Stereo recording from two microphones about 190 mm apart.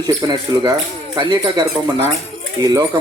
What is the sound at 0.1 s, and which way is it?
Speech, 20° right (ahead or behind).